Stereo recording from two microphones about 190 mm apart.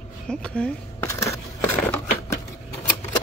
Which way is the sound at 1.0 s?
15° left (ahead or behind).